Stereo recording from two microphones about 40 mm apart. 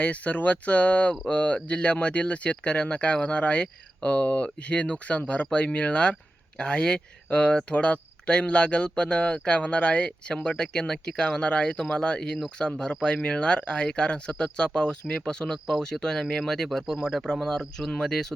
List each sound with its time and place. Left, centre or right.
0.0 s speech: left; by 18.3 s centre